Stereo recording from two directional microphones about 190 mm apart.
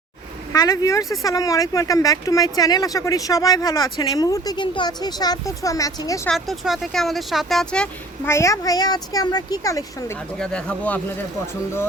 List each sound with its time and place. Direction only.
0.5 s speech: 15° left (ahead or behind)
6.2 s speech: centre (ahead or behind); by 10.2 s 15° left (ahead or behind)
10.3 s speech: 5° left (ahead or behind)